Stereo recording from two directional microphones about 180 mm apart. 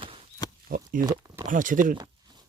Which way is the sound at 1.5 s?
45° right (ahead or behind).